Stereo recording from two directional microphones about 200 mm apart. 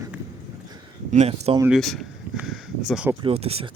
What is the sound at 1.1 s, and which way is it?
Speech, 35° right (ahead or behind).